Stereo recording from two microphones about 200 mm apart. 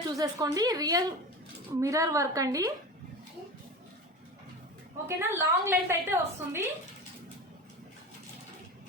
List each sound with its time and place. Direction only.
0.2 s a woman's voice: 15° right (ahead or behind)
5.0 s a woman's voice: 10° right (ahead or behind)